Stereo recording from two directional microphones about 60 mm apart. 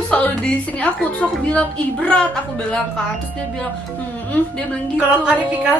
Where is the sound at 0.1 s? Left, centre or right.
Left.